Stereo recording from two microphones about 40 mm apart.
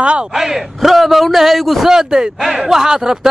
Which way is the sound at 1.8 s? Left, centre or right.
Centre.